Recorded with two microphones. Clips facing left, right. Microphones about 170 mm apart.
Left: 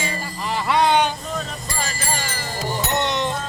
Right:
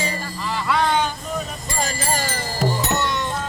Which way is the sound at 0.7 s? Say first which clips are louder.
Left 3 dB; 20° left (ahead or behind).